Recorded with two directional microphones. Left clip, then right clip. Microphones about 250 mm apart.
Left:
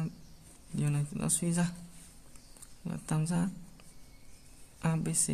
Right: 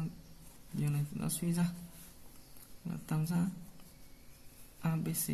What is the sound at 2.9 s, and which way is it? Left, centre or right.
Speech, left.